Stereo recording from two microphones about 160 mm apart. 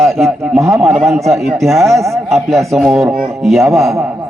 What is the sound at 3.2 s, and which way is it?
Speech, centre (ahead or behind).